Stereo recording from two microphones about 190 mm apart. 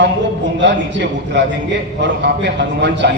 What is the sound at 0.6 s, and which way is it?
Speech, 70° right (ahead or behind).